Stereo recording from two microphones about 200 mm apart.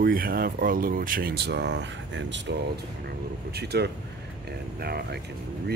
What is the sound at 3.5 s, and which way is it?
Speech, 55° right (ahead or behind).